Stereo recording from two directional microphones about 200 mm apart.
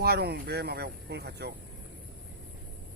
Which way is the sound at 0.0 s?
50° right (ahead or behind).